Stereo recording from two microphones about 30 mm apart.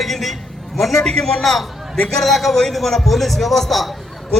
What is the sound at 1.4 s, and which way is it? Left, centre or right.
A man's voice, centre.